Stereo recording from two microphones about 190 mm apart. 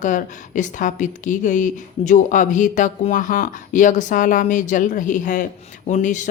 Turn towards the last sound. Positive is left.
turn(degrees=40)  # may be behind; listen again after turning